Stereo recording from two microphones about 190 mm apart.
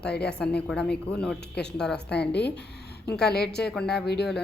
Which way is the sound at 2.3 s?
60° left (ahead or behind).